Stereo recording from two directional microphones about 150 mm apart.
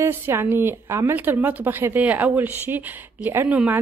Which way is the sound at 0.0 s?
15° right (ahead or behind).